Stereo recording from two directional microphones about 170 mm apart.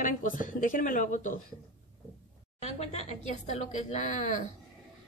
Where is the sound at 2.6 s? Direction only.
40° left (ahead or behind).